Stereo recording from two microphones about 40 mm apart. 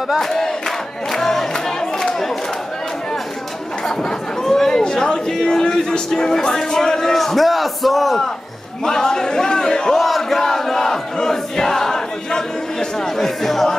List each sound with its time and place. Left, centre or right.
0.3 s crowd: centre
3.8 s speech: centre
8.8 s a sound: centre
9.9 s crowd: centre